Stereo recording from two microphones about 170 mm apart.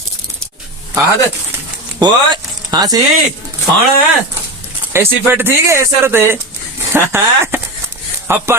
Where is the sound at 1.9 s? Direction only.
25° right (ahead or behind).